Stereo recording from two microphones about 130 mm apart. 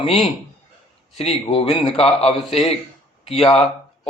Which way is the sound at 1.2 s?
50° left (ahead or behind).